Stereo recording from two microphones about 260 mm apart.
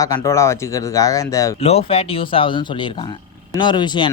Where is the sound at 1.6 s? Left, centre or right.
Left.